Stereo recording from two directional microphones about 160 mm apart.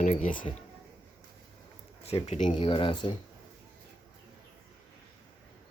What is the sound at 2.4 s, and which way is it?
Speech, 30° left (ahead or behind).